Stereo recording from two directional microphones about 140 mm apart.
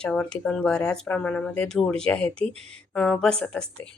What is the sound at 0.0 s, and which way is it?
A woman's voice, 5° left (ahead or behind).